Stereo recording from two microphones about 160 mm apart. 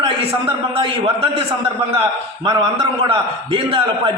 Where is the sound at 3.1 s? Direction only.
35° right (ahead or behind).